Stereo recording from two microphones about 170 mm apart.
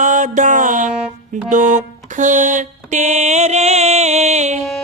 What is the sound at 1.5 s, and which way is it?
Mantra, 45° right (ahead or behind).